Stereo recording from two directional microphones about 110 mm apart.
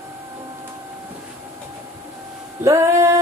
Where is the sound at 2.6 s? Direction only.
30° right (ahead or behind).